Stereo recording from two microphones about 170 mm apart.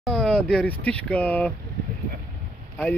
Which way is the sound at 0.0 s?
5° left (ahead or behind).